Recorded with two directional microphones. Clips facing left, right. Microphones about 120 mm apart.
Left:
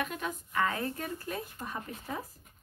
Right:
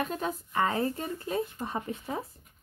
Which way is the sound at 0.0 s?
30° right (ahead or behind).